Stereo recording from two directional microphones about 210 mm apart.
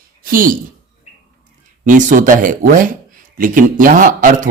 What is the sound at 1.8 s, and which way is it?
Speech, 35° right (ahead or behind).